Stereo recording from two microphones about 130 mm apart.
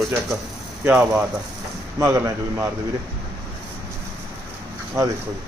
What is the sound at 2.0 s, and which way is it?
Speech, 25° right (ahead or behind).